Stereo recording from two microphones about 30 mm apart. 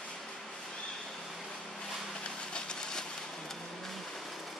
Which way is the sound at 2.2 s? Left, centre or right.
Left.